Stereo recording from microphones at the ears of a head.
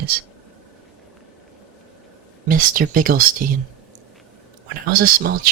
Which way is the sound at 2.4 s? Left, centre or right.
Right.